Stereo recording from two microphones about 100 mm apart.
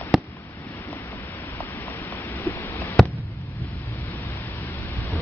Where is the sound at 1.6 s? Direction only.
20° left (ahead or behind).